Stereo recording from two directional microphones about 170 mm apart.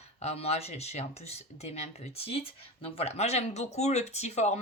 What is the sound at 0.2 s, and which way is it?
Speech, 40° left (ahead or behind).